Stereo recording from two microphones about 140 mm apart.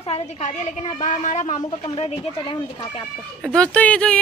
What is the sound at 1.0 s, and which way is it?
Speech, 60° left (ahead or behind).